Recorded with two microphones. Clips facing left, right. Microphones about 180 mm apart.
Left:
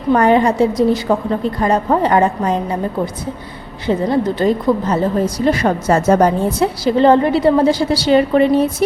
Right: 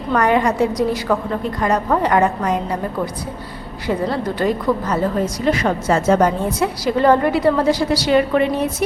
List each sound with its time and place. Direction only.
0.1 s a woman's voice: 30° left (ahead or behind)
3.8 s a woman's voice: 25° left (ahead or behind)
4.9 s a woman's voice: 35° left (ahead or behind)